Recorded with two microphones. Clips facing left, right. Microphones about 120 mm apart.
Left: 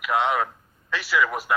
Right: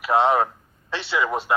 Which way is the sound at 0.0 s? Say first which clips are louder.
Right 4 dB; 35° right (ahead or behind).